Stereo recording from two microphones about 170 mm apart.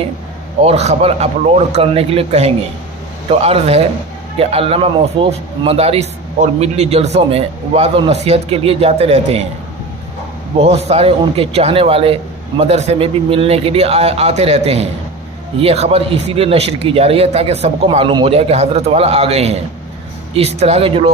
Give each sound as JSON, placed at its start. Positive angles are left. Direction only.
{"t": 0.6, "sound": "speech", "side_deg": -40}
{"t": 10.6, "sound": "speech", "side_deg": -40}